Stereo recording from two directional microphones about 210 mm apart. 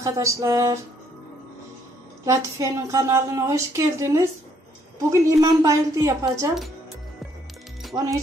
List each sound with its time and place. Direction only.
0.0 s a woman's voice: 15° right (ahead or behind)
2.2 s a woman's voice: 15° right (ahead or behind)
7.9 s speech: 15° right (ahead or behind)